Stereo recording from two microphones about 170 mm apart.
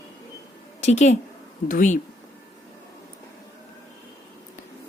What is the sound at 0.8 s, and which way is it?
A woman's voice, 45° left (ahead or behind).